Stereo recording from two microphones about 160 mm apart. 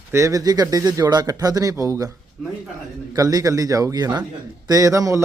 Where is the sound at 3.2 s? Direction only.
20° right (ahead or behind).